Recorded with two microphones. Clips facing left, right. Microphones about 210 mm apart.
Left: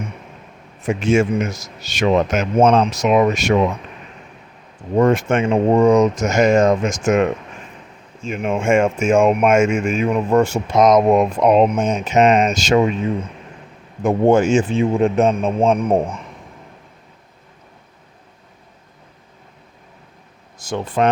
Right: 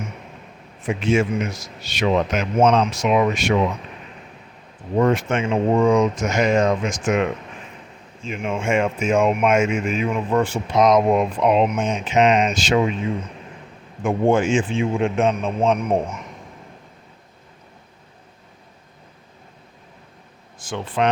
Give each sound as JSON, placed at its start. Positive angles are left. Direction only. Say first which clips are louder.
{"t": 0.8, "sound": "speech", "louder": "left 3 dB", "side_deg": 45}
{"t": 2.8, "sound": "a man's voice", "louder": "left 3 dB", "side_deg": 40}
{"t": 4.9, "sound": "speech", "louder": "left 4 dB", "side_deg": 45}
{"t": 5.7, "sound": "speech", "louder": "left 4 dB", "side_deg": 40}
{"t": 14.0, "sound": "a man's voice", "louder": "left 4 dB", "side_deg": 40}
{"t": 20.6, "sound": "speech", "louder": "left 4 dB", "side_deg": 40}